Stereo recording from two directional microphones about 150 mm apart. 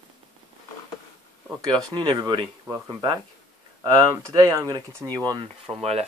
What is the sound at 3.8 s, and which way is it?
Speech, 25° right (ahead or behind).